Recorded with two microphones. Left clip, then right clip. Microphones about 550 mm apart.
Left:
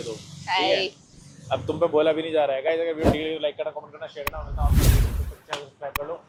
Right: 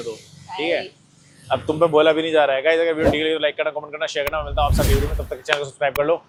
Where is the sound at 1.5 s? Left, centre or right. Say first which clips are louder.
Right 5 dB; right.